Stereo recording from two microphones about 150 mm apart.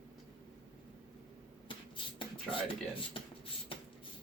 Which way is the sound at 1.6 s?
35° left (ahead or behind).